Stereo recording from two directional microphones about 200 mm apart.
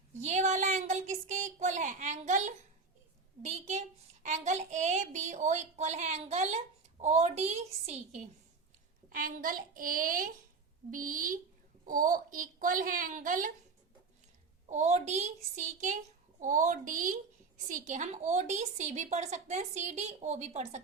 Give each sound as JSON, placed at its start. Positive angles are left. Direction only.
{"t": 0.2, "sound": "a child's voice", "side_deg": -35}
{"t": 14.7, "sound": "a child's voice", "side_deg": -35}